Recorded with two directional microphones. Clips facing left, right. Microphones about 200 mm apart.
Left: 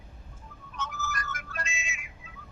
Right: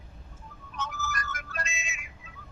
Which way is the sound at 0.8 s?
35° right (ahead or behind).